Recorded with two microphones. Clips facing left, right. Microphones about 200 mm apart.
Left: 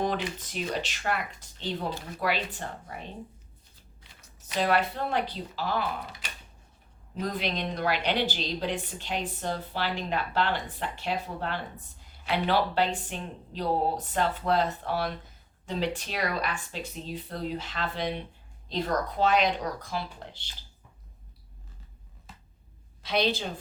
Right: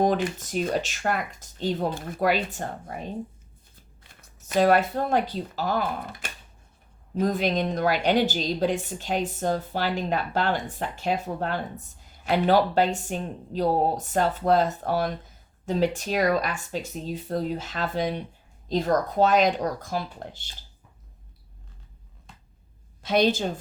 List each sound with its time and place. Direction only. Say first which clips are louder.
0.0 s a woman's voice: right 6 dB; 50° right (ahead or behind)
4.1 s a woman's voice: right 8 dB; 50° right (ahead or behind)
22.3 s a sound: left 1 dB; 5° left (ahead or behind)
23.0 s a woman's voice: right 6 dB; 45° right (ahead or behind)